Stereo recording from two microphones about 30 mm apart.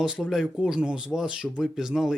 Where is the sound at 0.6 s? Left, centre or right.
Right.